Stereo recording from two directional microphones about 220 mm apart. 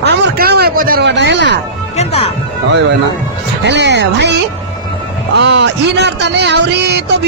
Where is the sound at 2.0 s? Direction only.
30° left (ahead or behind).